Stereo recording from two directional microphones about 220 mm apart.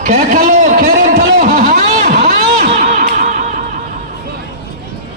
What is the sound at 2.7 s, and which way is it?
Music, 35° right (ahead or behind).